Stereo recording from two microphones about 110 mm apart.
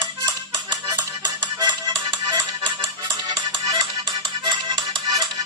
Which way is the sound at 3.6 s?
45° right (ahead or behind).